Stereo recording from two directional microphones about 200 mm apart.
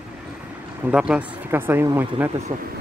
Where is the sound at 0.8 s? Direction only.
5° right (ahead or behind).